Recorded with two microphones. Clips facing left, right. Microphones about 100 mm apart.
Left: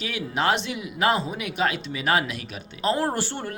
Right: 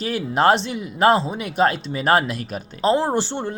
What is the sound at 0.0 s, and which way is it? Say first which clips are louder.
Speech: right 7 dB; 40° right (ahead or behind).